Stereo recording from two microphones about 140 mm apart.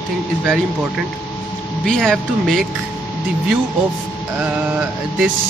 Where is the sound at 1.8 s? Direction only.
5° left (ahead or behind).